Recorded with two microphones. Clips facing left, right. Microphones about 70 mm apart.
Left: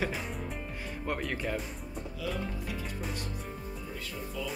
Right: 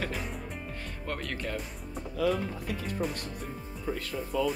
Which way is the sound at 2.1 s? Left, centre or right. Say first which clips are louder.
Right 8 dB; right.